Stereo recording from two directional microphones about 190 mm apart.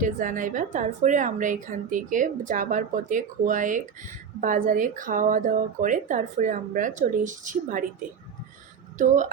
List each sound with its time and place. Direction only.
0.0 s speech: 45° right (ahead or behind)